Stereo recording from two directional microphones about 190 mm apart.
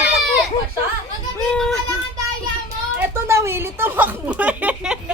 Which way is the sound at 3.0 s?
15° right (ahead or behind).